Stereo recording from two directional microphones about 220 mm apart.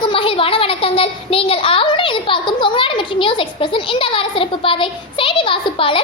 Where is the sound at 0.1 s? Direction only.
25° left (ahead or behind).